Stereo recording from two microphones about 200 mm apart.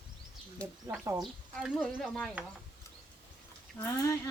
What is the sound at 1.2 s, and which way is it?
Speech, centre (ahead or behind).